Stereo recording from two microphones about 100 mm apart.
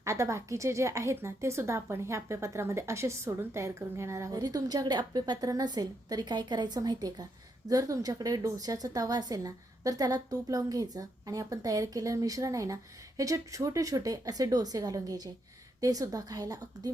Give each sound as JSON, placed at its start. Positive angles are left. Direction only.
{"t": 0.0, "sound": "speech", "side_deg": -30}
{"t": 4.4, "sound": "a woman's voice", "side_deg": -40}